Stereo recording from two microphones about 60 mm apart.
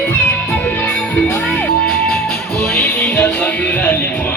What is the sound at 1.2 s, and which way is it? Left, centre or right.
Music, left.